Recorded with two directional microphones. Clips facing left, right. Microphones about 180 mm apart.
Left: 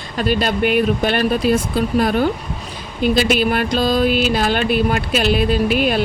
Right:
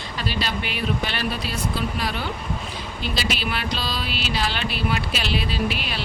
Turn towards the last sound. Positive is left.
turn(degrees=50)  # may be behind; listen again after turning